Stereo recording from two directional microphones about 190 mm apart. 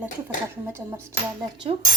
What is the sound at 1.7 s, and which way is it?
Speech, 30° right (ahead or behind).